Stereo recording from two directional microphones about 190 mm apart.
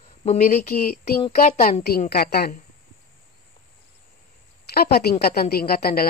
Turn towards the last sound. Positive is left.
turn(degrees=55)  # may be behind; listen again after turning